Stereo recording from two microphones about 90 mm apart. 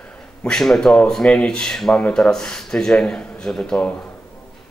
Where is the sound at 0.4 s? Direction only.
5° left (ahead or behind).